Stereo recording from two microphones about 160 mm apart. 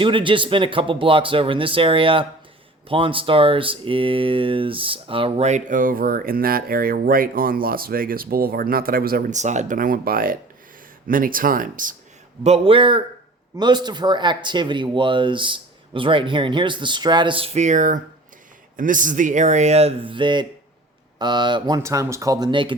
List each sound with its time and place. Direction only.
0.0 s speech: 30° right (ahead or behind); by 9.4 s 65° right (ahead or behind)
9.4 s speech: 50° right (ahead or behind)
12.4 s speech: 40° right (ahead or behind)